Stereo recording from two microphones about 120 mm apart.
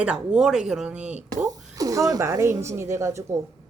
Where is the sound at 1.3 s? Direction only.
30° right (ahead or behind).